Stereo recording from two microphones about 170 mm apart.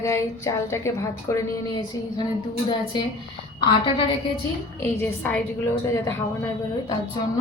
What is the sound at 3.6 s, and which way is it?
Speech, 30° left (ahead or behind).